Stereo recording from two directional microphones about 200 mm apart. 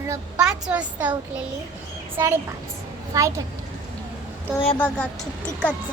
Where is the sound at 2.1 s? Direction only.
10° right (ahead or behind).